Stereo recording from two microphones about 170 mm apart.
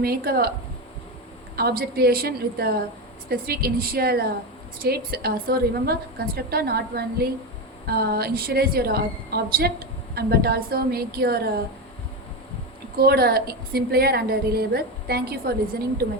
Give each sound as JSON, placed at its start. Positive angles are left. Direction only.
{"t": 0.0, "sound": "a woman's voice", "side_deg": -65}
{"t": 1.5, "sound": "a woman's voice", "side_deg": -65}
{"t": 13.0, "sound": "a woman's voice", "side_deg": -65}